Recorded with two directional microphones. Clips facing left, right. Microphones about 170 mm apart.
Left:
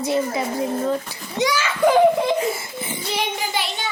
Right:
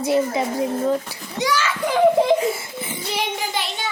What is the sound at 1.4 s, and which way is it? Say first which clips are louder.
Speech: left 2 dB; 20° left (ahead or behind).